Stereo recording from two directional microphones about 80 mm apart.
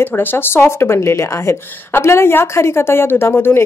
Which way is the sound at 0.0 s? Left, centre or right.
Left.